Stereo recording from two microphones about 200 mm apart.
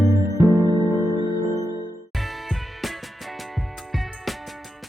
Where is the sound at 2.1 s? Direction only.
Centre (ahead or behind).